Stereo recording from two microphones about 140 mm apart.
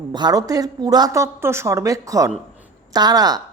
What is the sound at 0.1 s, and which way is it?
A woman's voice, 30° right (ahead or behind).